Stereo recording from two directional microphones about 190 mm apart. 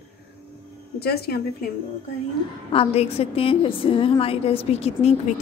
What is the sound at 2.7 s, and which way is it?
A woman's voice, 30° left (ahead or behind).